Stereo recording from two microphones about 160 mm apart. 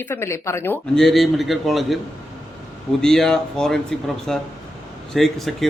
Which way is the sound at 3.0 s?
5° left (ahead or behind).